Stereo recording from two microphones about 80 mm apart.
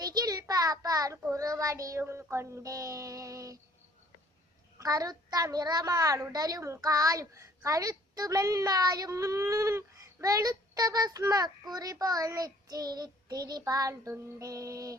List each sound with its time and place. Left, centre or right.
0.0 s a child's voice: right
4.8 s a child's voice: right